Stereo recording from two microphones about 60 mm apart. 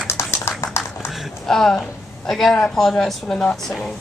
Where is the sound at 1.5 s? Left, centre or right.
Centre.